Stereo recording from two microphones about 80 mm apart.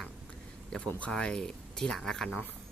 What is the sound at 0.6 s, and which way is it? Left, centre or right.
Speech, centre.